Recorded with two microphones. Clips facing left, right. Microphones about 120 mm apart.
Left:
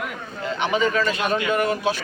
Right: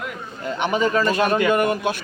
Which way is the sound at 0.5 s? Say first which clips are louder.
Right 1 dB; 45° right (ahead or behind).